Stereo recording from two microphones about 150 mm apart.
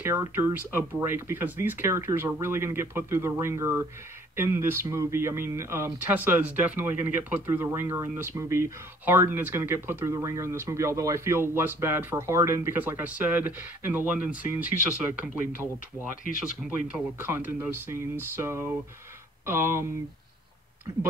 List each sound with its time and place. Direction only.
0.0 s speech: 15° right (ahead or behind)
16.6 s speech: 5° right (ahead or behind)